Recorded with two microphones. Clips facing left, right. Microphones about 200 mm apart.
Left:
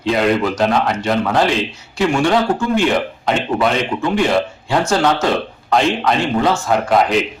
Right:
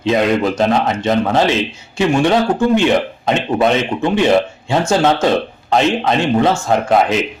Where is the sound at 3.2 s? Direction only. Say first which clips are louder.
Right 2 dB; 25° right (ahead or behind).